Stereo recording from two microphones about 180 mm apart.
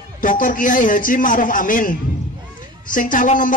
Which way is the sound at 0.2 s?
50° left (ahead or behind).